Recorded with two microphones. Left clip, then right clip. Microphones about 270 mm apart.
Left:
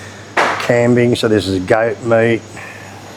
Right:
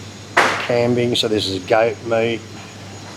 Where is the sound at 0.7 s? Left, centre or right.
Centre.